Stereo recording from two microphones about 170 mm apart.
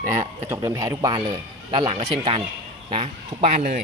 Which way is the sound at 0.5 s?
15° right (ahead or behind).